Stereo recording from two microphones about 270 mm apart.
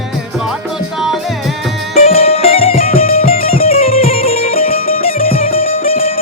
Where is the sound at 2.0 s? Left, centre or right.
Left.